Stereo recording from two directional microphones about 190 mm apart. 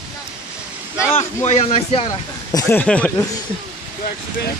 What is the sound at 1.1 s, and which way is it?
Speech, 35° left (ahead or behind).